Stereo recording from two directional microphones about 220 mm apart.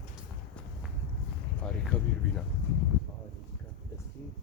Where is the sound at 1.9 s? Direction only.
5° left (ahead or behind).